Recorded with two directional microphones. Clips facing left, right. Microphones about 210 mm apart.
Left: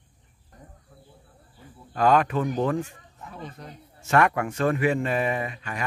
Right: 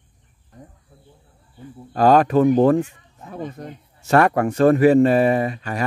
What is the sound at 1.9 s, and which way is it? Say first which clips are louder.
A man's voice: right 6 dB; 35° right (ahead or behind).